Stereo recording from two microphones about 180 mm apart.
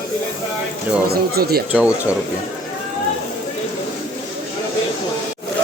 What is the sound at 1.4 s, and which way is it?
Speech, 60° right (ahead or behind).